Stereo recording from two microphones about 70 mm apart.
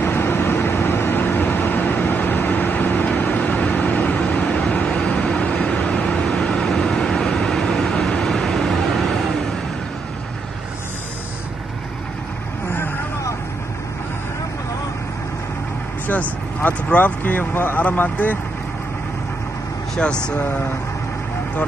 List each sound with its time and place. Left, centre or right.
0.0 s vehicle: left; by 9.2 s centre
16.1 s speech: left
20.0 s speech: centre